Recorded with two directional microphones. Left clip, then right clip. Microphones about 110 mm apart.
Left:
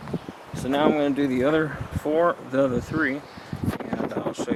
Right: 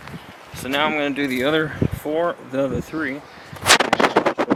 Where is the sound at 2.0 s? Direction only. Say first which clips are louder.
Left 2 dB; 10° right (ahead or behind).